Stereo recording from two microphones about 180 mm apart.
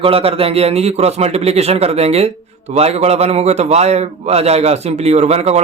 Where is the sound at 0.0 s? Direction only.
30° right (ahead or behind).